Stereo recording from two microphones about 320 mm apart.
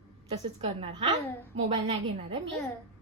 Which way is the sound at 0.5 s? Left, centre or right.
Centre.